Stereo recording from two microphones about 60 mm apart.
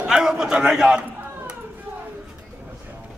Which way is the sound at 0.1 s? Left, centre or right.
Centre.